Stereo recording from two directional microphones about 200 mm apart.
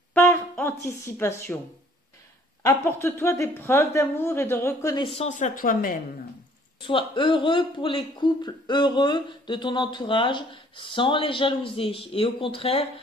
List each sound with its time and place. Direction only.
0.1 s speech: 10° left (ahead or behind)
2.6 s a woman's voice: 15° left (ahead or behind); by 5.9 s 45° left (ahead or behind)
6.8 s speech: 25° left (ahead or behind)